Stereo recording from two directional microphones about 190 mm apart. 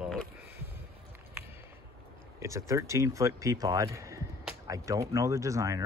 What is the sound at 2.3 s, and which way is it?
Speech, 15° right (ahead or behind).